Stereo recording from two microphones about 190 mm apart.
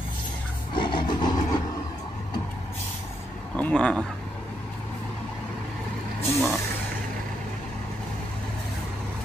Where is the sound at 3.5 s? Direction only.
5° left (ahead or behind).